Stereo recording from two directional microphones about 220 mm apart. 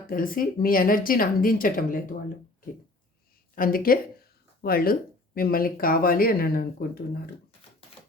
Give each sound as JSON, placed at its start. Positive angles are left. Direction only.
{"t": 0.1, "sound": "speech", "side_deg": 40}
{"t": 3.5, "sound": "speech", "side_deg": 40}